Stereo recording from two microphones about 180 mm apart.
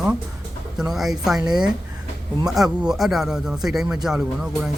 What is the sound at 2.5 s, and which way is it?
Speech, 5° right (ahead or behind).